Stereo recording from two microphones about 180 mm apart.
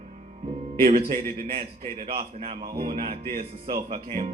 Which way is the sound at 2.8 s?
35° right (ahead or behind).